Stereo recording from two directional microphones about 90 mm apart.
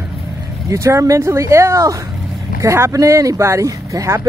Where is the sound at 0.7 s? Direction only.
35° right (ahead or behind).